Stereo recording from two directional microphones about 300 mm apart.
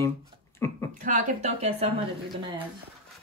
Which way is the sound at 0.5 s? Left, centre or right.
Centre.